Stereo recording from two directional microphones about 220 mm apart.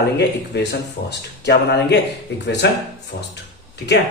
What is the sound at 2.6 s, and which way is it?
Speech, 50° left (ahead or behind).